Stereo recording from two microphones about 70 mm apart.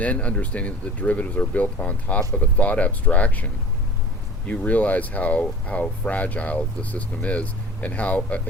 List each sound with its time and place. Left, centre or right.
0.0 s speech: centre